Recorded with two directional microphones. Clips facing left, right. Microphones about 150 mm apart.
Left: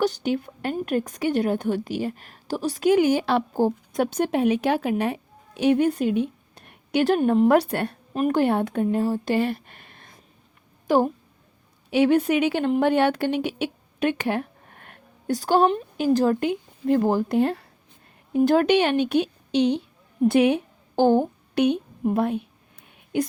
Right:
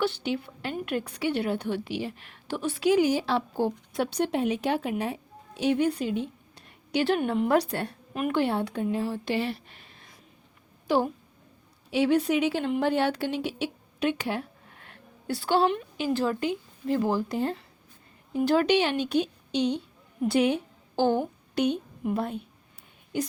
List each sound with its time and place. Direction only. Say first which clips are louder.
0.0 s a woman's voice: left 5 dB; 45° left (ahead or behind); by 3.4 s 60° left (ahead or behind)
3.5 s speech: left 5 dB; 45° left (ahead or behind)
7.7 s a woman's voice: left 5 dB; 60° left (ahead or behind)
8.1 s speech: left 5 dB; 40° left (ahead or behind); by 10.2 s 60° left (ahead or behind)
10.8 s a woman's voice: left 5 dB; 50° left (ahead or behind)
11.9 s a woman's voice: left 4 dB; 60° left (ahead or behind)
18.3 s a woman's voice: left 4 dB; 50° left (ahead or behind)